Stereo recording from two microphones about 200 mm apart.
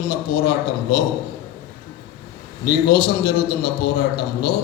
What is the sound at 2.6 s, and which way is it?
A man's voice, 50° left (ahead or behind).